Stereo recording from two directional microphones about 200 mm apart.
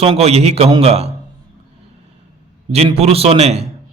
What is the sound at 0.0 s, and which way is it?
A man's voice, 30° right (ahead or behind).